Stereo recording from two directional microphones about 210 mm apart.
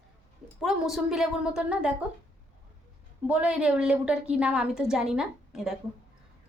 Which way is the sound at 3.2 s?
5° right (ahead or behind).